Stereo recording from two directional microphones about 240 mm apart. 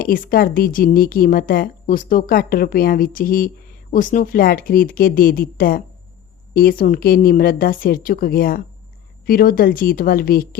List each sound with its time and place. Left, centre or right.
0.0 s a woman's voice: left